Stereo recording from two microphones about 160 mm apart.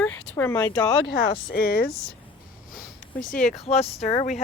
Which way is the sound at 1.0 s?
85° left.